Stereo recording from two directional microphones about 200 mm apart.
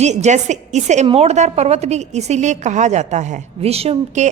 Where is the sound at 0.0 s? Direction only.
35° right (ahead or behind).